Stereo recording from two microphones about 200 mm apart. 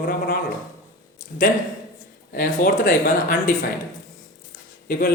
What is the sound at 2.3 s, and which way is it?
Speech, 45° left (ahead or behind).